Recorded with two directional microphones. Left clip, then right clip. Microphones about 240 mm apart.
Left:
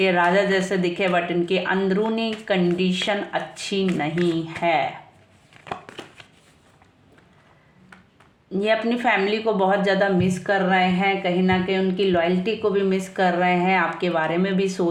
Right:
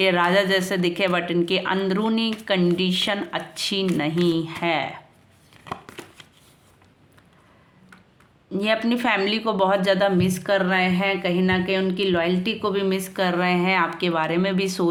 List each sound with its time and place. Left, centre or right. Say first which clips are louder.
0.0 s speech: even; right
8.5 s a woman's voice: left 1 dB; right